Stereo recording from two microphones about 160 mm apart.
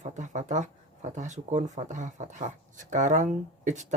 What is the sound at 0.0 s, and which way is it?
Speech, 50° right (ahead or behind).